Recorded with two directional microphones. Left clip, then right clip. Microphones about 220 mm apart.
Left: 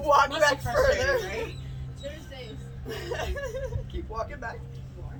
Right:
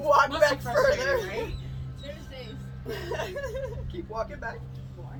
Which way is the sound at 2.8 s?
5° left (ahead or behind).